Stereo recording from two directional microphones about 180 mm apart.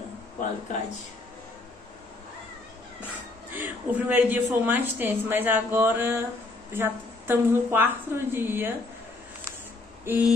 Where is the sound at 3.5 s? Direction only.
10° right (ahead or behind).